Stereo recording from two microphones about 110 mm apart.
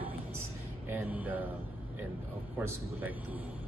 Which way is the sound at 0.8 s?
15° right (ahead or behind).